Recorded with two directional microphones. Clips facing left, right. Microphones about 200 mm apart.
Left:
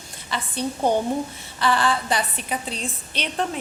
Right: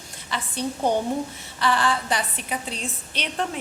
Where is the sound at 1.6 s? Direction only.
30° left (ahead or behind).